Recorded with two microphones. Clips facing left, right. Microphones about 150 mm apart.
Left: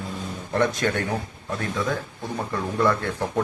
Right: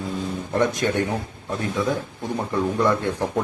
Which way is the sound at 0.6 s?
15° right (ahead or behind).